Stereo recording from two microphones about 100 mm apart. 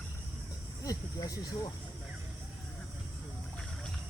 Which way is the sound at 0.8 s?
40° left (ahead or behind).